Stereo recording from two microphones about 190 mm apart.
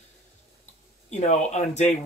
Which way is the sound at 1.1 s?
35° left (ahead or behind).